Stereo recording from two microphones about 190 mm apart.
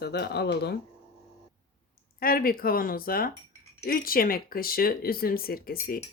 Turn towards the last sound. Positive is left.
turn(degrees=50)  # may be behind; listen again after turning